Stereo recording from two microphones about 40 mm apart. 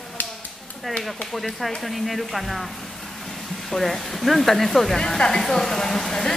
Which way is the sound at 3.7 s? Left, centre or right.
Centre.